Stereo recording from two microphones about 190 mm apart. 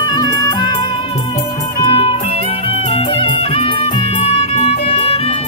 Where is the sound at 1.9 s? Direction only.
30° left (ahead or behind).